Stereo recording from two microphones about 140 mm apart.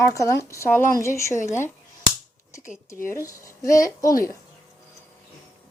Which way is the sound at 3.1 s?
20° left (ahead or behind).